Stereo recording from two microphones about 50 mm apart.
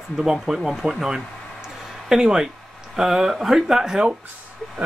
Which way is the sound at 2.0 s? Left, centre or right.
Centre.